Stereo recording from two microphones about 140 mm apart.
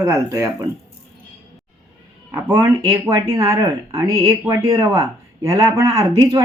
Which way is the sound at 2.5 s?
25° right (ahead or behind).